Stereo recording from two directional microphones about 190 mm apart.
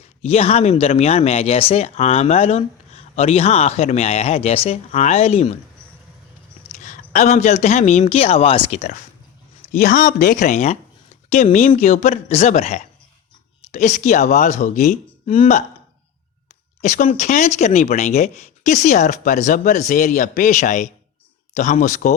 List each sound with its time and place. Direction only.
0.2 s speech: 35° left (ahead or behind)
6.8 s speech: 40° left (ahead or behind)
9.7 s speech: 50° left (ahead or behind)
16.8 s speech: 40° left (ahead or behind)